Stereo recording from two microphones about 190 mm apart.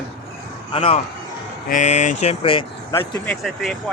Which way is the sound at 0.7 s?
30° left (ahead or behind).